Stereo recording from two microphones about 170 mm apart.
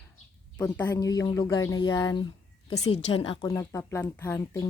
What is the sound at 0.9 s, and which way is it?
Speech, 20° left (ahead or behind).